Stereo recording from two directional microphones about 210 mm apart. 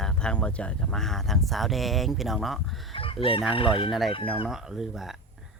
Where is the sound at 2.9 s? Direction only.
25° left (ahead or behind).